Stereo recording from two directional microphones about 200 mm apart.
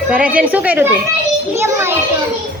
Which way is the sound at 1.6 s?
10° right (ahead or behind).